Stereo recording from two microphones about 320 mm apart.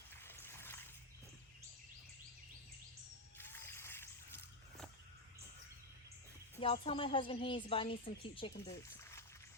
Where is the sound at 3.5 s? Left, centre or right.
Centre.